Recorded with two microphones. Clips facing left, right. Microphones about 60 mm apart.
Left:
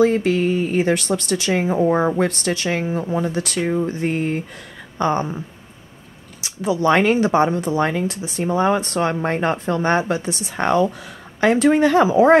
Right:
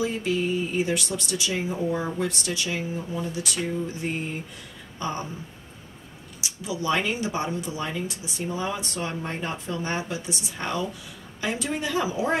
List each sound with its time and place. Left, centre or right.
0.0 s speech: left
6.4 s speech: left